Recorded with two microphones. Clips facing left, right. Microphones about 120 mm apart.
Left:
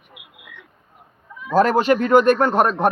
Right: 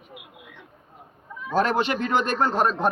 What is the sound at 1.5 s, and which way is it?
Speech, 40° left (ahead or behind).